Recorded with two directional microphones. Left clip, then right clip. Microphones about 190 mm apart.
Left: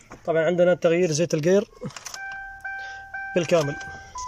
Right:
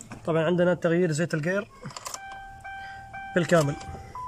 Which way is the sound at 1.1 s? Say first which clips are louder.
Left 7 dB; 15° left (ahead or behind).